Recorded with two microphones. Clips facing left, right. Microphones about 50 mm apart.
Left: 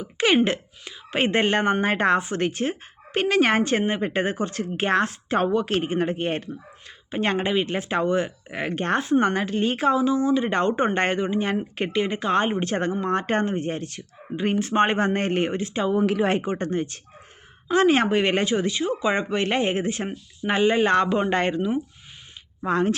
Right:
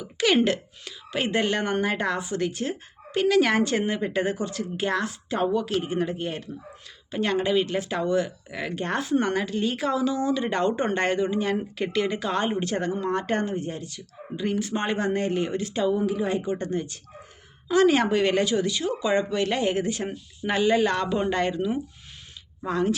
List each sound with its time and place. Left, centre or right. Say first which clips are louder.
0.0 s speech: left 2 dB; left
6.5 s speech: left 2 dB; left
9.0 s speech: left 2 dB; left
15.5 s speech: even; left
16.0 s speech: left 4 dB; left
16.5 s speech: left 2 dB; left
22.6 s speech: left 3 dB; left